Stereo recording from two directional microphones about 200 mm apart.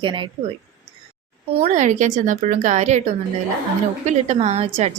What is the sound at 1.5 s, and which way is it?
A woman's voice, 35° right (ahead or behind).